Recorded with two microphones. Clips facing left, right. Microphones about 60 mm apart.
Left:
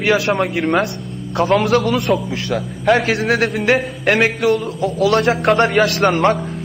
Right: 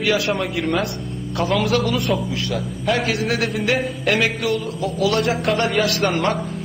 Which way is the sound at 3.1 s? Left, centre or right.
Left.